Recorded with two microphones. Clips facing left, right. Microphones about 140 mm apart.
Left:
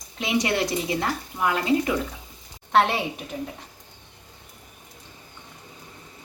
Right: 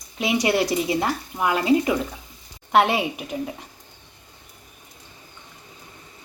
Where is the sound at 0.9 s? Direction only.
20° right (ahead or behind).